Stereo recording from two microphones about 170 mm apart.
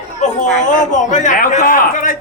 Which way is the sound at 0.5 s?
45° left (ahead or behind).